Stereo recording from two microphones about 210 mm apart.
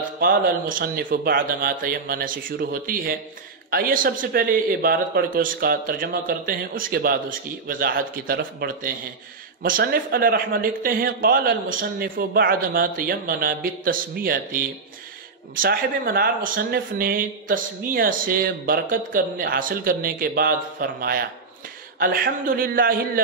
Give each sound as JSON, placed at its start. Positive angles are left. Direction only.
{"t": 0.2, "sound": "speech", "side_deg": -40}